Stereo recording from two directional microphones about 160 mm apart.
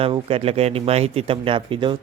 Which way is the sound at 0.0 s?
35° right (ahead or behind).